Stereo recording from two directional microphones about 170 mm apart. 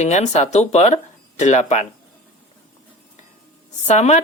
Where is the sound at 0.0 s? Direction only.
40° left (ahead or behind).